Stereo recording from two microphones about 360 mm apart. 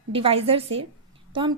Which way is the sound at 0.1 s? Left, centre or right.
Centre.